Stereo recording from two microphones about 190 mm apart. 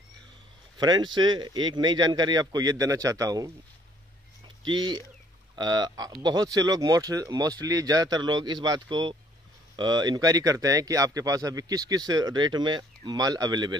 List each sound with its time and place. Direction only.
0.7 s speech: 20° right (ahead or behind)
4.6 s speech: 25° right (ahead or behind)